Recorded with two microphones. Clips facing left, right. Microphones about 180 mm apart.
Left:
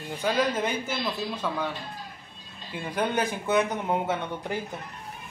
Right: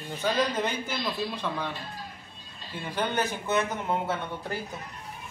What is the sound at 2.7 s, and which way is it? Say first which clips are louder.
Speech: left 2 dB; 10° left (ahead or behind).